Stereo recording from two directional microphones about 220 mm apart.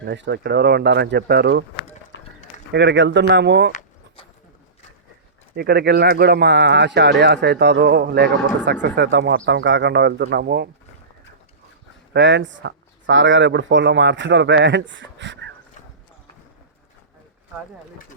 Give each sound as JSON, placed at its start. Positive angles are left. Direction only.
{"t": 0.1, "sound": "speech", "side_deg": -50}
{"t": 2.7, "sound": "speech", "side_deg": -55}
{"t": 3.7, "sound": "a sound", "side_deg": 35}
{"t": 5.5, "sound": "speech", "side_deg": -45}
{"t": 12.1, "sound": "speech", "side_deg": -55}